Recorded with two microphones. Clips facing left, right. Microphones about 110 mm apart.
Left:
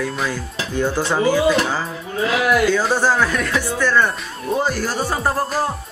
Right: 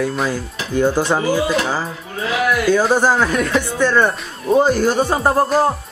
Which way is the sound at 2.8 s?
15° right (ahead or behind).